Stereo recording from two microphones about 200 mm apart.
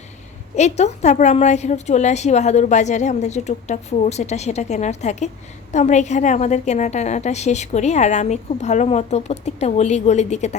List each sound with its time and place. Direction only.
0.5 s a woman's voice: 35° left (ahead or behind)